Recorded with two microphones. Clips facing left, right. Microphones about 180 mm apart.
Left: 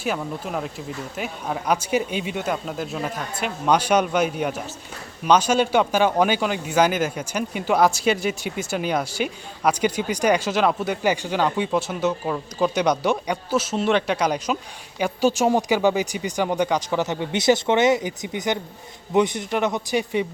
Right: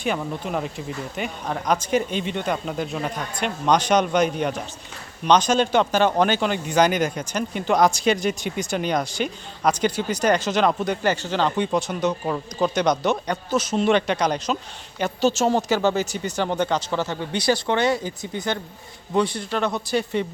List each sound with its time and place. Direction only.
0.0 s speech: centre (ahead or behind)